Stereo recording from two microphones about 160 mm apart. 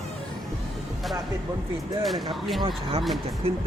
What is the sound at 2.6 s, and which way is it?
Speech, 30° right (ahead or behind).